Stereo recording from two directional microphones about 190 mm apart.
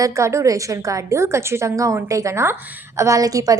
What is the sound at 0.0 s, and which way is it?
A woman's voice, 15° right (ahead or behind).